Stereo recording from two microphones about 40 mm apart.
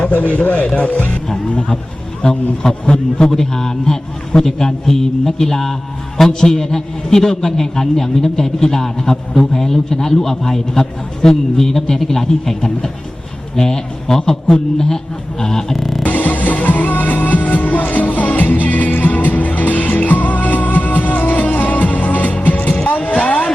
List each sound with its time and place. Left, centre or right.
0.0 s a man's voice: left
2.6 s a man's voice: centre
16.0 s music: left
23.0 s a sound: left